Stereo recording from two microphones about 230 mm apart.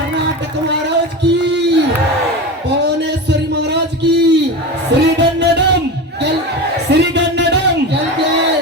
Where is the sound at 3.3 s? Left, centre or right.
Right.